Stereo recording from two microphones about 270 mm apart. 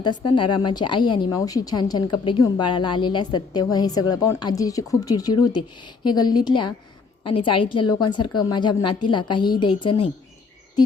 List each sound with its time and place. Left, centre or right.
0.0 s a woman's voice: centre